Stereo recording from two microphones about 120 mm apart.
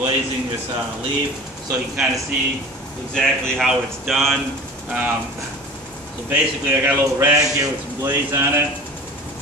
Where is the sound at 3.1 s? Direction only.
5° left (ahead or behind).